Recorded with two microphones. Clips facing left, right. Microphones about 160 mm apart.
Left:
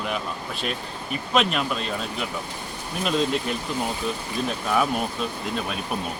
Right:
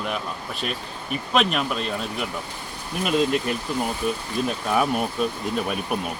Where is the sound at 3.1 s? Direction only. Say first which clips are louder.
Right 2 dB; 5° right (ahead or behind).